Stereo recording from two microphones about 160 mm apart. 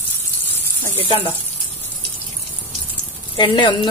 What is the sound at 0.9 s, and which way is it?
Speech, 35° left (ahead or behind).